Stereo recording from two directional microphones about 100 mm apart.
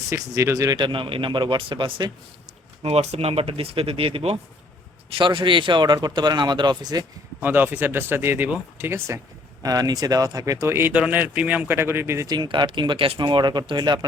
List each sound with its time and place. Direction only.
0.1 s speech: 30° right (ahead or behind)
0.8 s a man's voice: 55° right (ahead or behind)
2.8 s speech: 90° right
5.0 s a man's voice: 60° right (ahead or behind)
7.4 s speech: 20° right (ahead or behind)
9.6 s speech: 40° right (ahead or behind)
12.3 s speech: 45° right (ahead or behind)